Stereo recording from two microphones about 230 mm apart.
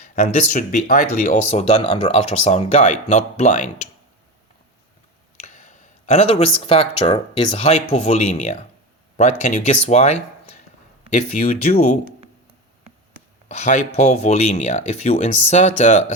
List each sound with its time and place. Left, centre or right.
0.0 s speech: left
5.4 s speech: left
13.5 s speech: left